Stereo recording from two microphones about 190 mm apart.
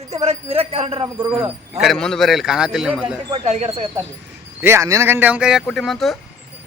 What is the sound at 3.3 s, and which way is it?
Speech, 30° right (ahead or behind).